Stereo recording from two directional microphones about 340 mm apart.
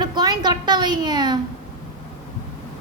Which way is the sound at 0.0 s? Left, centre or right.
Centre.